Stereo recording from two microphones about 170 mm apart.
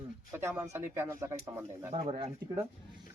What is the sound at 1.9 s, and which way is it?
Speech, 35° right (ahead or behind).